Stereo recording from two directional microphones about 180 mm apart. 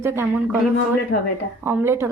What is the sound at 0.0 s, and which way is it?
Speech, 10° right (ahead or behind).